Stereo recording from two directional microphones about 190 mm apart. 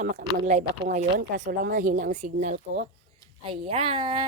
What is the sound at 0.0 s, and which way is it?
A woman's voice, 40° right (ahead or behind).